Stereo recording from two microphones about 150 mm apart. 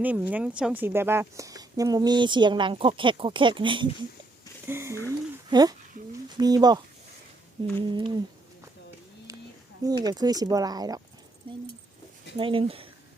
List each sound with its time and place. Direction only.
0.0 s a woman's voice: 10° right (ahead or behind); by 3.8 s 35° right (ahead or behind)
4.6 s speech: 15° right (ahead or behind)
7.8 s speech: 30° right (ahead or behind)
9.8 s a woman's voice: 25° right (ahead or behind)
11.5 s a sound: 35° right (ahead or behind)
12.4 s speech: 35° right (ahead or behind)